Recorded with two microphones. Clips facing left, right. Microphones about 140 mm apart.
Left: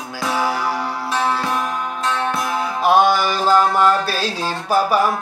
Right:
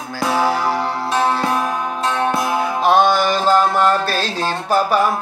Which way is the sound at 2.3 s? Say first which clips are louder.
Right 3 dB; 30° right (ahead or behind).